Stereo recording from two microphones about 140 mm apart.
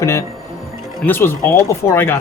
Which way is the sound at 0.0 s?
20° left (ahead or behind).